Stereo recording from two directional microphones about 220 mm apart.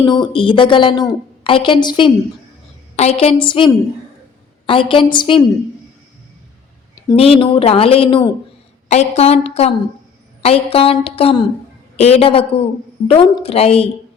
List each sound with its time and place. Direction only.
0.0 s speech: 20° left (ahead or behind)
6.9 s speech: 20° left (ahead or behind)